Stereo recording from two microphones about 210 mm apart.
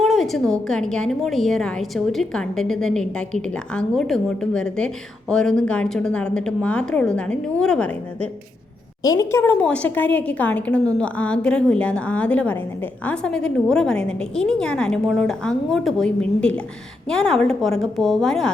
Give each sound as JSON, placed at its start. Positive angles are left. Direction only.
{"t": 0.0, "sound": "a woman's voice", "side_deg": 0}